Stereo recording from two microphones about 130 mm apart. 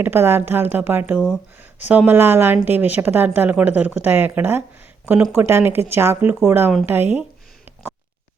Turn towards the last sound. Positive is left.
turn(degrees=-15)  # may be behind; listen again after turning